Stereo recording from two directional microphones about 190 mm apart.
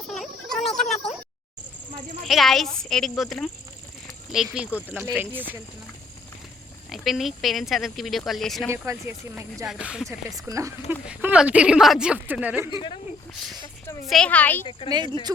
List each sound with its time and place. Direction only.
0.1 s a sound: centre (ahead or behind)
2.2 s speech: centre (ahead or behind)
4.0 s a sound: centre (ahead or behind)
4.5 s a woman's voice: 5° right (ahead or behind)
6.9 s speech: centre (ahead or behind)
8.7 s a woman's voice: 15° right (ahead or behind)
10.1 s a woman's voice: 15° right (ahead or behind)
14.1 s a woman's voice: 5° left (ahead or behind)
14.8 s speech: 25° right (ahead or behind)